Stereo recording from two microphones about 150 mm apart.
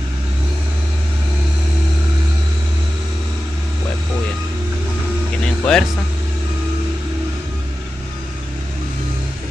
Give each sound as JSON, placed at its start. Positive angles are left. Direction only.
{"t": 5.4, "sound": "music", "side_deg": 5}